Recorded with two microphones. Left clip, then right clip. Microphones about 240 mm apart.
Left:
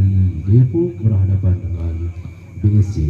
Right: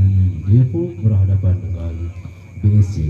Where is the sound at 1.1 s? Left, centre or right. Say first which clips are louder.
Even; right.